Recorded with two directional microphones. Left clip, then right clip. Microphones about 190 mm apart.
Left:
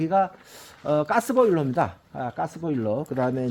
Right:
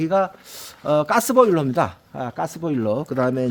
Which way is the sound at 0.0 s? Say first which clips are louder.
Right 2 dB; 65° right (ahead or behind).